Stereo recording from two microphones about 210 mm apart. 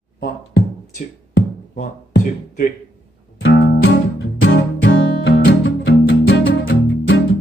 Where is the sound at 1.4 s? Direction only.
50° left (ahead or behind).